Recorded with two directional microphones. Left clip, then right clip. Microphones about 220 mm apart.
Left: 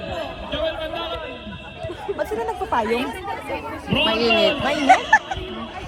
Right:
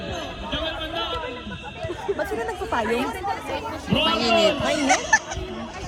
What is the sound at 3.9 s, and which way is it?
Speech, centre (ahead or behind).